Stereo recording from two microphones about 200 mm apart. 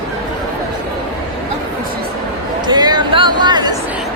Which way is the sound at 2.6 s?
20° right (ahead or behind).